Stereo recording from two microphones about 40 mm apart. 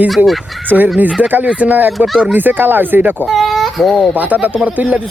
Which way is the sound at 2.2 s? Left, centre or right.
Right.